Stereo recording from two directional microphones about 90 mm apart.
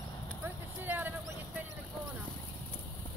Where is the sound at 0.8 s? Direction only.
20° right (ahead or behind).